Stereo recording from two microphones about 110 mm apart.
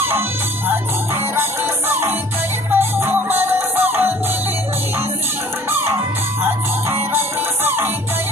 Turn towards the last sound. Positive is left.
turn(degrees=-20)  # may be behind; listen again after turning